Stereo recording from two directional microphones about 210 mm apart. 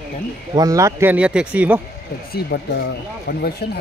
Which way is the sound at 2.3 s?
50° left (ahead or behind).